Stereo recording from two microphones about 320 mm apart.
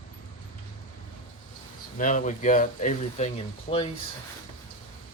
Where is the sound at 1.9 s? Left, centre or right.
Left.